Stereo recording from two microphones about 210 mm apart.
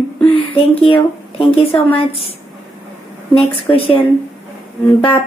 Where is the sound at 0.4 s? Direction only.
25° left (ahead or behind).